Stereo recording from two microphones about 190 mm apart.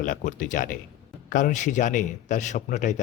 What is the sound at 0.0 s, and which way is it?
A man's voice, 45° left (ahead or behind).